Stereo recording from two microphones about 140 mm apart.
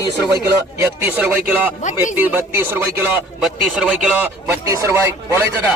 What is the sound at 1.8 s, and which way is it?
Speech, 60° left (ahead or behind).